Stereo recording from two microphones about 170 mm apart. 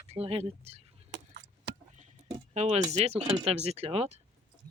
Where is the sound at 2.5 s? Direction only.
40° right (ahead or behind).